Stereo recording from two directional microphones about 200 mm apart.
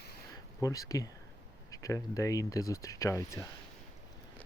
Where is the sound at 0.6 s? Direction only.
15° left (ahead or behind).